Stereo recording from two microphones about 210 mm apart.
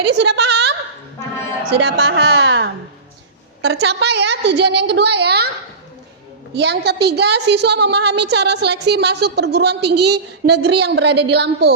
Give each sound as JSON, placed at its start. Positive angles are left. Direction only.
{"t": 0.0, "sound": "a woman's voice", "side_deg": -55}
{"t": 3.8, "sound": "a woman's voice", "side_deg": -55}
{"t": 6.5, "sound": "a woman's voice", "side_deg": -50}